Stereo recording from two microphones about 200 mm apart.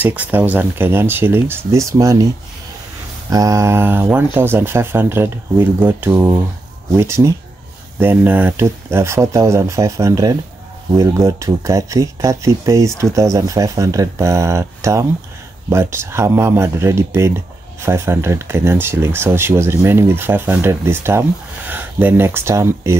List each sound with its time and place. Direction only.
0.0 s speech: 10° right (ahead or behind)
3.3 s speech: 15° right (ahead or behind)